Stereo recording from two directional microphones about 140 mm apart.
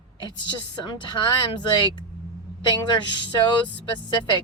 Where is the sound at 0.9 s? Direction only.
35° left (ahead or behind).